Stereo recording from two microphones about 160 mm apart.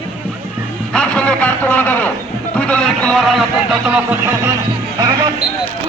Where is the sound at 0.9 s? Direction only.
5° left (ahead or behind).